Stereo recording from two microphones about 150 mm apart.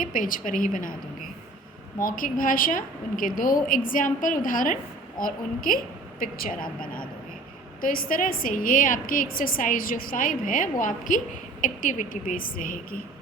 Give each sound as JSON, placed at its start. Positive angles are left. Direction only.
{"t": 0.0, "sound": "a woman's voice", "side_deg": 65}
{"t": 2.0, "sound": "a woman's voice", "side_deg": 65}